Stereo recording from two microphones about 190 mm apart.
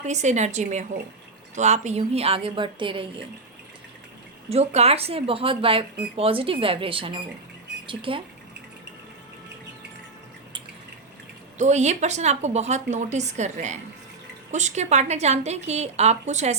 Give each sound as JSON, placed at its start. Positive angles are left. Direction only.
{"t": 0.0, "sound": "speech", "side_deg": -35}
{"t": 4.4, "sound": "speech", "side_deg": -35}
{"t": 11.5, "sound": "speech", "side_deg": -40}